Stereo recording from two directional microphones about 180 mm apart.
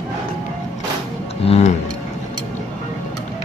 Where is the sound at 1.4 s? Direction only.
35° left (ahead or behind).